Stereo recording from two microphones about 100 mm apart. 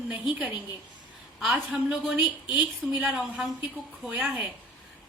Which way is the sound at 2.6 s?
5° right (ahead or behind).